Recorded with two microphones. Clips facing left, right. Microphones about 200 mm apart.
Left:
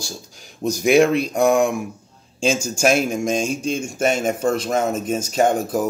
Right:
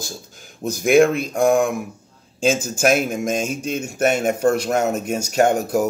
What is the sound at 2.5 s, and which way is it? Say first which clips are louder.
Speech: left 1 dB; 55° right (ahead or behind).